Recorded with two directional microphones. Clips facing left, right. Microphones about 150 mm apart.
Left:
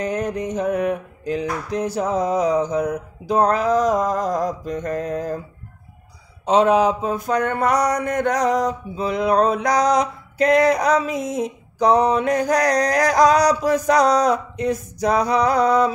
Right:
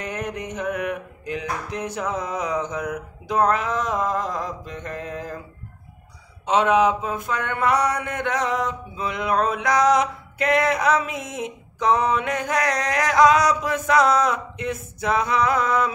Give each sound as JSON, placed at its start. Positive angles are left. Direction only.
{"t": 0.0, "sound": "mantra", "side_deg": 35}
{"t": 6.4, "sound": "mantra", "side_deg": 35}